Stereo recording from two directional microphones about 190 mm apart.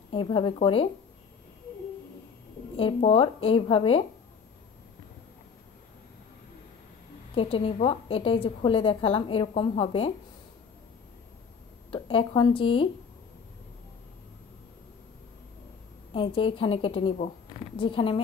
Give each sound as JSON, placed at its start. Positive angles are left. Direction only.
{"t": 0.1, "sound": "a woman's voice", "side_deg": 25}
{"t": 2.8, "sound": "a woman's voice", "side_deg": 30}
{"t": 7.3, "sound": "a woman's voice", "side_deg": 30}
{"t": 11.9, "sound": "a woman's voice", "side_deg": 25}
{"t": 16.1, "sound": "a woman's voice", "side_deg": 30}